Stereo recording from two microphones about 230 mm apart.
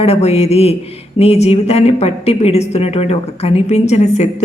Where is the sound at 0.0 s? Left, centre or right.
Left.